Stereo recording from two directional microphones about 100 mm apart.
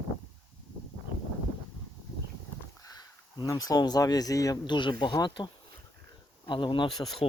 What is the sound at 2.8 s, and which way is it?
Speech, 40° left (ahead or behind).